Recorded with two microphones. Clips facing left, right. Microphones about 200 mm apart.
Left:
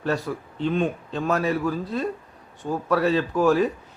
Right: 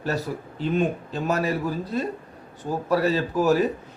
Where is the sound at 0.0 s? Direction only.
5° right (ahead or behind).